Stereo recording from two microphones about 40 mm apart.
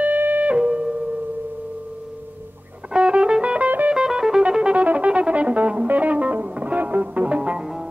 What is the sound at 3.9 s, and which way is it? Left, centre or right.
Music, centre.